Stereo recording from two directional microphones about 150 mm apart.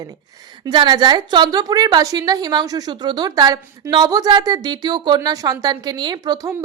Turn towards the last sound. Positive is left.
turn(degrees=-25)  # may be behind; listen again after turning